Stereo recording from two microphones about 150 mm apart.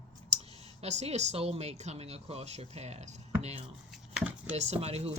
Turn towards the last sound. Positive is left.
turn(degrees=-40)  # may be behind; listen again after turning